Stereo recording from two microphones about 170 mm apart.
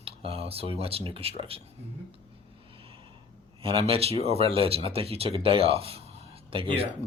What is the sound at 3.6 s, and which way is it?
Speech, 35° right (ahead or behind).